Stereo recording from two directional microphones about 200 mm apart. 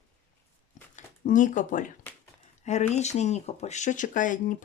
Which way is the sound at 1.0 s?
40° left (ahead or behind).